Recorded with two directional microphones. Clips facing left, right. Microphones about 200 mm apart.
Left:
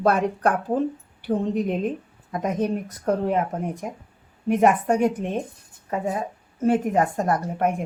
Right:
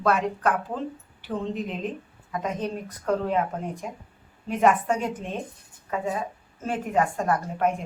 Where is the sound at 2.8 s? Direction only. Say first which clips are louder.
Left 3 dB; 45° left (ahead or behind).